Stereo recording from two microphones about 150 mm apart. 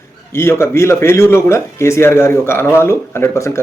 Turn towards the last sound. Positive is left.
turn(degrees=20)  # may be behind; listen again after turning